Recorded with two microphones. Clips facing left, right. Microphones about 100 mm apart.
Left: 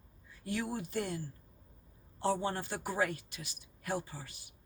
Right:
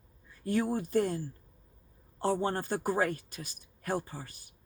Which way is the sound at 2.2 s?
45° right (ahead or behind).